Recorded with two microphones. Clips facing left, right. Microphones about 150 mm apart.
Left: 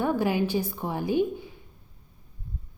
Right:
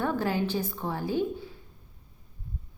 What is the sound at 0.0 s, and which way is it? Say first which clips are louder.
A woman's voice: left 3 dB; 15° left (ahead or behind).